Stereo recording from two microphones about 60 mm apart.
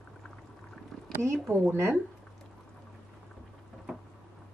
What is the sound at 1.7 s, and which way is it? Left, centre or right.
Speech, right.